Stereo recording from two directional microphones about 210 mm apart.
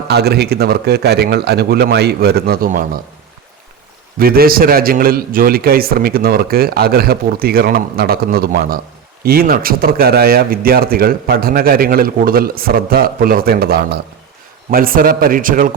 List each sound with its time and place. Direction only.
0.1 s a man's voice: 50° right (ahead or behind)
4.2 s a man's voice: 45° right (ahead or behind)